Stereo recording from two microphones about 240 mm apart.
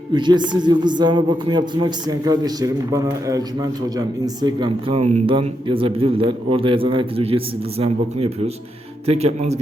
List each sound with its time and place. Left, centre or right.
0.1 s a man's voice: centre